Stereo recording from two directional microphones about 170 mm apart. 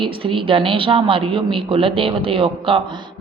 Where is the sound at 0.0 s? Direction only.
30° right (ahead or behind).